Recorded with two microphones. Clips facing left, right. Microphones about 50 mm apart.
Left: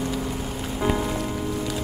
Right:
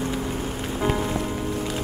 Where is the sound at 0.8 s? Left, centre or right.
Centre.